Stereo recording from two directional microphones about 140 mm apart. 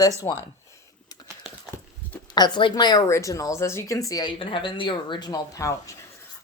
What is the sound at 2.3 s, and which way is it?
A woman's voice, 30° left (ahead or behind).